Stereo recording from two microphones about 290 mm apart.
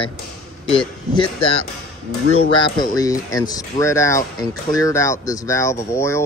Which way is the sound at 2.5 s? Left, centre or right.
Centre.